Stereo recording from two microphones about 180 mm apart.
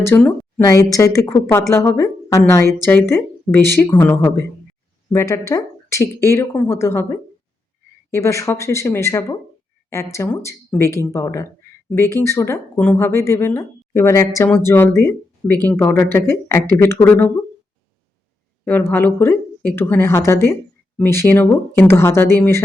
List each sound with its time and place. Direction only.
0.0 s a woman's voice: 15° left (ahead or behind)
18.6 s speech: 10° left (ahead or behind)